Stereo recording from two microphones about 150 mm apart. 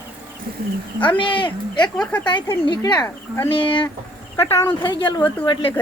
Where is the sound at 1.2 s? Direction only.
35° left (ahead or behind).